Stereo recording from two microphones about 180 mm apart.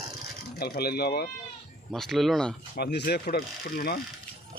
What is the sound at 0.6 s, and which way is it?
Speech, 60° left (ahead or behind).